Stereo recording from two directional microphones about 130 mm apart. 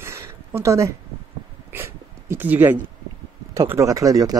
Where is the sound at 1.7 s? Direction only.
15° right (ahead or behind).